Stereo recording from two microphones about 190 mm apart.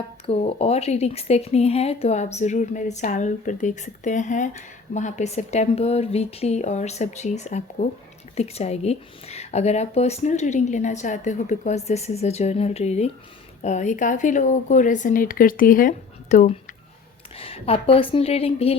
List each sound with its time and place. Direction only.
0.3 s speech: 30° left (ahead or behind)
17.3 s speech: 30° left (ahead or behind)